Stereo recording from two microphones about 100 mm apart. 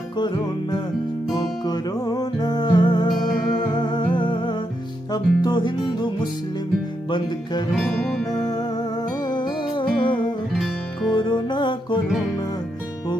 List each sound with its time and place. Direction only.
0.2 s music: 45° left (ahead or behind)
7.7 s music: centre (ahead or behind)
9.3 s music: 50° left (ahead or behind)
10.6 s music: centre (ahead or behind)
11.1 s music: 50° left (ahead or behind)